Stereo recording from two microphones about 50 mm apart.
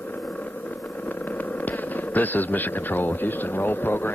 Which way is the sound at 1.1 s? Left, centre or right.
Left.